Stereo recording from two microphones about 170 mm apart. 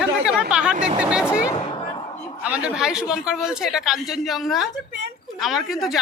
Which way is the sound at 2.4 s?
5° right (ahead or behind).